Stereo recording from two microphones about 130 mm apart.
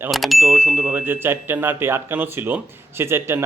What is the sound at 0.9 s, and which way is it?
A man's voice, 15° right (ahead or behind).